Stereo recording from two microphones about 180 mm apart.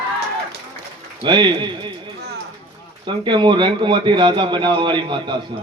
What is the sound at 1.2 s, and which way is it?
Speech, 25° right (ahead or behind).